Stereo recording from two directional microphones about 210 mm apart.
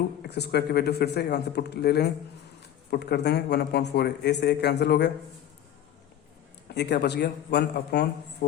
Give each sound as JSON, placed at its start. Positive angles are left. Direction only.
{"t": 0.2, "sound": "a man's voice", "side_deg": 50}
{"t": 6.7, "sound": "a man's voice", "side_deg": 55}